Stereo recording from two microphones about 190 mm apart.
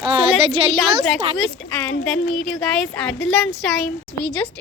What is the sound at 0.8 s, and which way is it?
A woman's voice, centre (ahead or behind).